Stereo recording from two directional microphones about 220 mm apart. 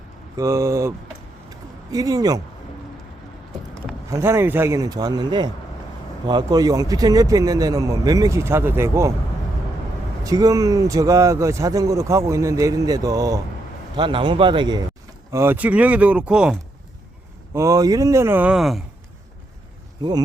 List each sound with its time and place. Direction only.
0.3 s speech: 15° right (ahead or behind)
1.5 s a sound: 15° right (ahead or behind)
4.1 s speech: 10° right (ahead or behind)
10.2 s a man's voice: 15° right (ahead or behind)